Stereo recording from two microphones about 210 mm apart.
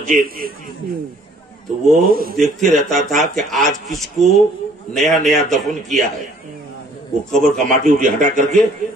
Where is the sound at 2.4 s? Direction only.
Centre (ahead or behind).